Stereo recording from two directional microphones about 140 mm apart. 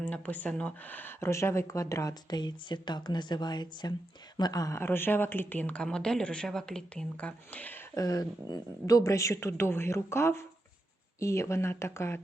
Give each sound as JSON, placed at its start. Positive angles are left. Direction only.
{"t": 0.0, "sound": "a woman's voice", "side_deg": 10}
{"t": 7.9, "sound": "speech", "side_deg": 25}